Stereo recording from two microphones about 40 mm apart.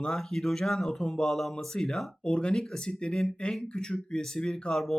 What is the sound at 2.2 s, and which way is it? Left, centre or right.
Speech, left.